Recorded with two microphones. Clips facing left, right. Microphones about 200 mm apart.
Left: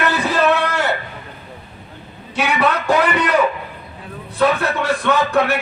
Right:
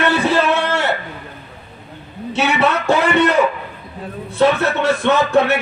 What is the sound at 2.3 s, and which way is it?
Speech, 25° right (ahead or behind).